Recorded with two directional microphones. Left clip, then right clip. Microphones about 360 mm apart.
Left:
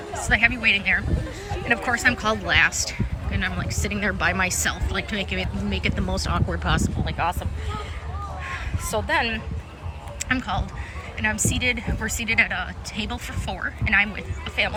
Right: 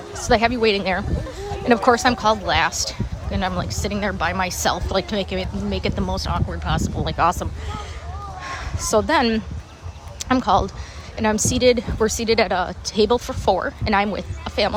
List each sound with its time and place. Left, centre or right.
0.1 s speech: centre
8.4 s a sound: centre
10.2 s speech: centre